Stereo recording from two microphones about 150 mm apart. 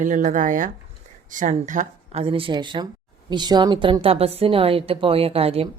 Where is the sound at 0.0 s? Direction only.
60° right (ahead or behind).